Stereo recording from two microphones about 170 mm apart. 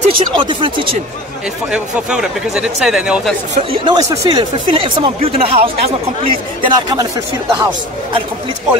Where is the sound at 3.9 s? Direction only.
20° right (ahead or behind).